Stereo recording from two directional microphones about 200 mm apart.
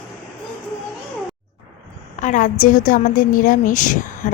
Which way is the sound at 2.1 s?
40° left (ahead or behind).